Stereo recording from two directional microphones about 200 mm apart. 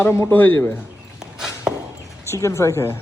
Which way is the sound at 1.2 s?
Centre (ahead or behind).